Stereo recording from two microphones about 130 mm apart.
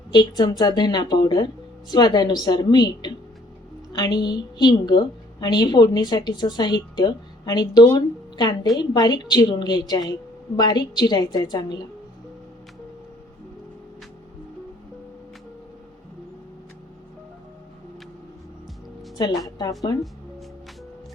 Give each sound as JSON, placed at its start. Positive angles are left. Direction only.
{"t": 0.1, "sound": "a woman's voice", "side_deg": 30}
{"t": 19.1, "sound": "a woman's voice", "side_deg": 30}